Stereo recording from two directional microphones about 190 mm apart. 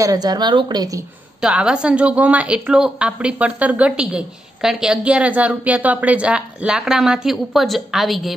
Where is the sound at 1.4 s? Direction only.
5° right (ahead or behind).